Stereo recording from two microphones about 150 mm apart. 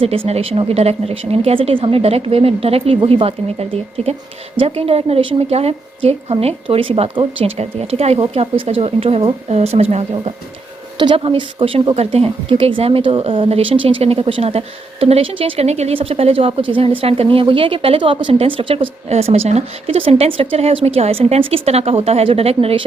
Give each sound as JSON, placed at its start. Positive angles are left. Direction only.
{"t": 0.3, "sound": "a woman's voice", "side_deg": -40}
{"t": 10.9, "sound": "a woman's voice", "side_deg": -30}